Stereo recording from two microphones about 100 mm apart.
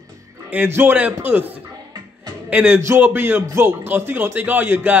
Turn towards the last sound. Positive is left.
turn(degrees=-20)  # may be behind; listen again after turning